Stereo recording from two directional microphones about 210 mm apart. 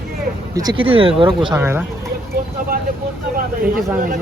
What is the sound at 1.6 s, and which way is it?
Speech, 10° right (ahead or behind).